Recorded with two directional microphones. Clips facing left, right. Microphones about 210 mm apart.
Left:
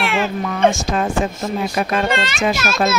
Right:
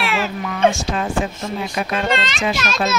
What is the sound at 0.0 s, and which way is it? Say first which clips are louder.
Speech: left 2 dB; 55° left (ahead or behind).